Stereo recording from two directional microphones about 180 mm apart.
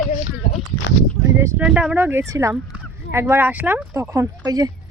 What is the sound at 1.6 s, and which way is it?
Speech, 5° right (ahead or behind).